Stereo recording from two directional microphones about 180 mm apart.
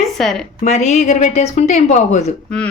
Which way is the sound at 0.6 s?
40° left (ahead or behind).